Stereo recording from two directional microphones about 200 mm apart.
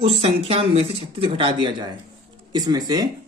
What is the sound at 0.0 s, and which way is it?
Speech, 30° right (ahead or behind).